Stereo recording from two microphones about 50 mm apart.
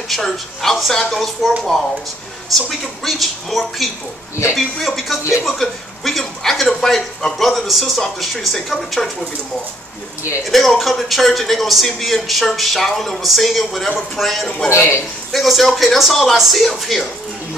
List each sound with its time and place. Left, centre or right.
0.1 s a man's voice: centre
2.5 s a man's voice: centre
10.5 s a man's voice: centre
14.8 s a man's voice: left
15.3 s a man's voice: centre